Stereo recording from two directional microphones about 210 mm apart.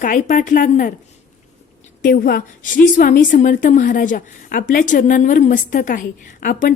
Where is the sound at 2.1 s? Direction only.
45° left (ahead or behind).